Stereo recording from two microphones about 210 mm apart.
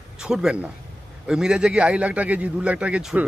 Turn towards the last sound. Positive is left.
turn(degrees=-5)  # may be behind; listen again after turning